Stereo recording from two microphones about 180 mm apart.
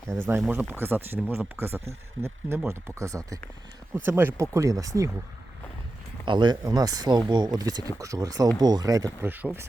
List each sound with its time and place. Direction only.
0.1 s speech: 15° right (ahead or behind)
6.2 s speech: 25° right (ahead or behind)